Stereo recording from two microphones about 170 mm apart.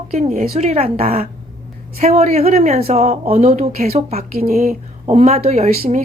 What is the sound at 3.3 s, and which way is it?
Speech, 50° right (ahead or behind).